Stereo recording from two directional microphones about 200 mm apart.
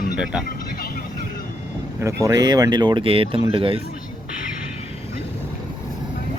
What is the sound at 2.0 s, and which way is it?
Speech, 15° right (ahead or behind).